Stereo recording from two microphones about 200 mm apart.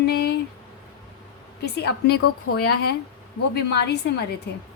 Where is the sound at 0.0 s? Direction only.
50° left (ahead or behind).